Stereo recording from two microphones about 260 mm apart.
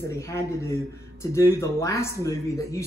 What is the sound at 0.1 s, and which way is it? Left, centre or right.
Speech, centre.